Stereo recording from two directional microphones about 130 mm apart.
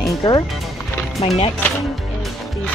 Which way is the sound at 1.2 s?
45° left (ahead or behind).